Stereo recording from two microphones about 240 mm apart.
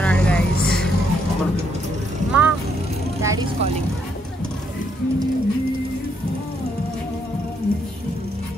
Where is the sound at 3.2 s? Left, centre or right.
Centre.